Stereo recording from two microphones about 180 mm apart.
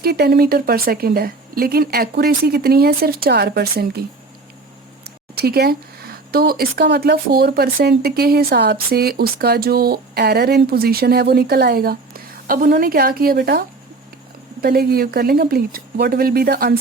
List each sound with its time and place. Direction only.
0.0 s speech: 60° right (ahead or behind)
5.0 s speech: 60° right (ahead or behind)